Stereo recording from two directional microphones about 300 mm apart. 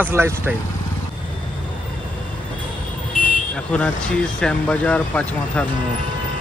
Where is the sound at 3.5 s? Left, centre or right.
Centre.